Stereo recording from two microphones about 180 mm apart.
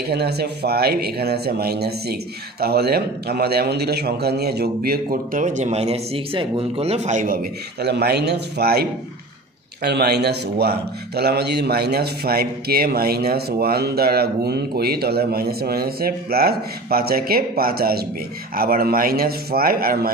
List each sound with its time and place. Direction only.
0.1 s a man's voice: 65° right (ahead or behind); by 7.3 s 45° right (ahead or behind)
7.8 s a man's voice: 65° right (ahead or behind)
9.8 s a man's voice: 65° right (ahead or behind)